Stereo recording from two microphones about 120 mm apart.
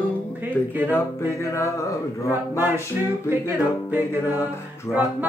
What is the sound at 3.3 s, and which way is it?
Music, 15° right (ahead or behind).